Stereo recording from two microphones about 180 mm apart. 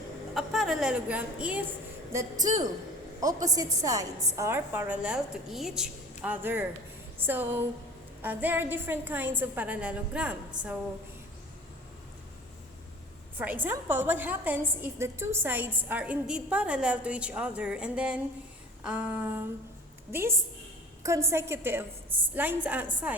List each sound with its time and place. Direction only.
0.3 s a woman's voice: centre (ahead or behind)
2.1 s a woman's voice: 20° right (ahead or behind)
13.3 s a woman's voice: 10° right (ahead or behind)